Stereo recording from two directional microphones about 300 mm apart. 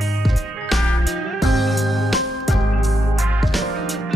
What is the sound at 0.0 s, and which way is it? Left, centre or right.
Music, centre.